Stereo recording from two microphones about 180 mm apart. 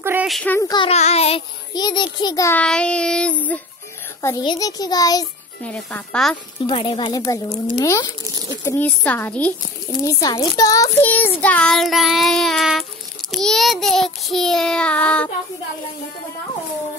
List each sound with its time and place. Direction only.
0.0 s a sound: 10° right (ahead or behind)
0.3 s child singing: 5° left (ahead or behind)
0.6 s a child's voice: 20° left (ahead or behind)
0.8 s child singing: 35° left (ahead or behind)
1.7 s a child's voice: 25° left (ahead or behind)
2.6 s child singing: 5° left (ahead or behind)
4.2 s a child's voice: 20° left (ahead or behind)
5.6 s child singing: 5° left (ahead or behind)
6.6 s a child's voice: 30° left (ahead or behind); by 9.5 s 10° left (ahead or behind)
10.0 s a child's voice: 20° left (ahead or behind); by 12.8 s centre (ahead or behind)
13.3 s child singing: centre (ahead or behind)